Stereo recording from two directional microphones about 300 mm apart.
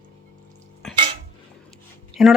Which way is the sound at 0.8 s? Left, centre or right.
Centre.